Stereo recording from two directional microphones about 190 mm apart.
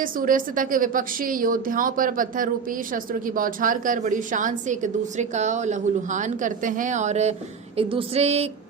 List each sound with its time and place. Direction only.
0.0 s a woman's voice: 45° right (ahead or behind)